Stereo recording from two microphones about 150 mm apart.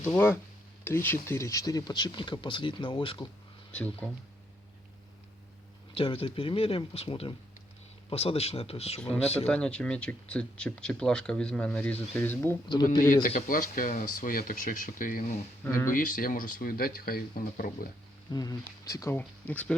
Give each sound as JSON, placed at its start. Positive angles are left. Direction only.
{"t": 0.0, "sound": "speech", "side_deg": 15}
{"t": 3.7, "sound": "speech", "side_deg": 5}
{"t": 5.9, "sound": "speech", "side_deg": 40}
{"t": 9.5, "sound": "speech", "side_deg": 5}
{"t": 12.6, "sound": "speech", "side_deg": 30}
{"t": 13.5, "sound": "speech", "side_deg": 65}
{"t": 15.6, "sound": "speech", "side_deg": 20}
{"t": 15.9, "sound": "speech", "side_deg": 65}
{"t": 18.3, "sound": "speech", "side_deg": 25}
{"t": 19.5, "sound": "speech", "side_deg": 10}